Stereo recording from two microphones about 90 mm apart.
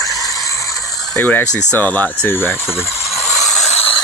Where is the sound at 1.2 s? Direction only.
15° left (ahead or behind).